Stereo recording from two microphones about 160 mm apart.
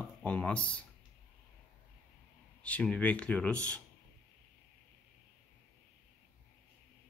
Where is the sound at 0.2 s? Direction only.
10° left (ahead or behind).